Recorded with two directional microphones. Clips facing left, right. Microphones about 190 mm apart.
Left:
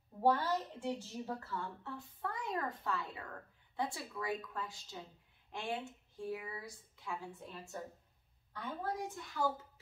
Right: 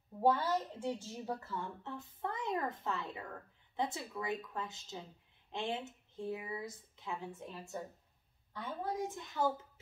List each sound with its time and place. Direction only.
0.2 s a woman's voice: 15° right (ahead or behind)